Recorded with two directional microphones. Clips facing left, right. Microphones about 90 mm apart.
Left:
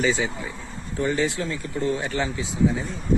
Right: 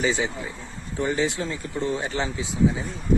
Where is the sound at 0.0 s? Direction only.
20° right (ahead or behind).